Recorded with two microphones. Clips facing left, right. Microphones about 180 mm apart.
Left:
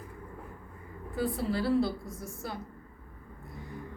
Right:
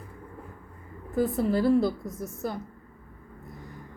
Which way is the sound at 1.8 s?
20° right (ahead or behind).